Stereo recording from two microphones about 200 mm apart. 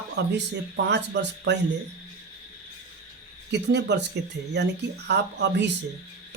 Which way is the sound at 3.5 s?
60° right (ahead or behind).